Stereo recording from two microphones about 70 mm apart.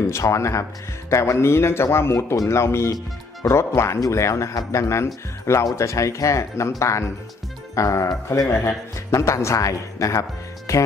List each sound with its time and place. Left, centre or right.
0.0 s speech: left
2.1 s speech: left
8.5 s speech: left